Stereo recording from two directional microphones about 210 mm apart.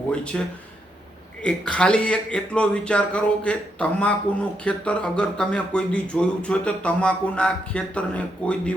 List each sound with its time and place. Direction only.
0.1 s speech: 5° left (ahead or behind)